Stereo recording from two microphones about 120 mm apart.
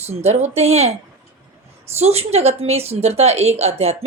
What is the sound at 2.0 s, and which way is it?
Speech, 60° right (ahead or behind).